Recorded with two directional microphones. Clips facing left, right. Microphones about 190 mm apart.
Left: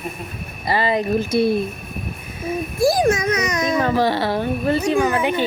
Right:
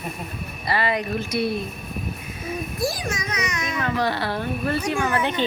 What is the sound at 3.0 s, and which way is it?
A child's voice, 55° left (ahead or behind).